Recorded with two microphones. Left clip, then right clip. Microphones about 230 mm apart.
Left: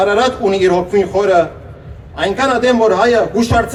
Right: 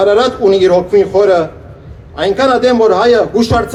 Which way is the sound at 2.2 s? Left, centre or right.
Right.